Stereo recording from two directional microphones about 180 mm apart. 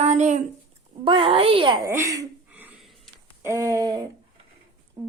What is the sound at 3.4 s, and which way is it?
Speech, 15° right (ahead or behind).